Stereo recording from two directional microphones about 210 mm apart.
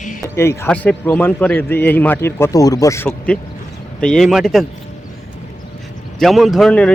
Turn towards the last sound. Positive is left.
turn(degrees=5)  # may be behind; listen again after turning